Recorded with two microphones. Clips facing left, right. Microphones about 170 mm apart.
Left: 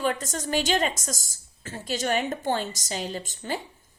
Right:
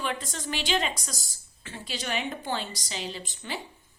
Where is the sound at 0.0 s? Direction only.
45° left (ahead or behind).